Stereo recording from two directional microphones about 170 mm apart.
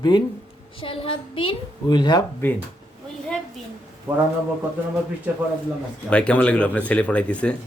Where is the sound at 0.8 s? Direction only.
30° left (ahead or behind).